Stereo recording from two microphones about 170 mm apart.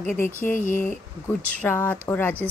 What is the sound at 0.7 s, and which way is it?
Speech, 50° left (ahead or behind).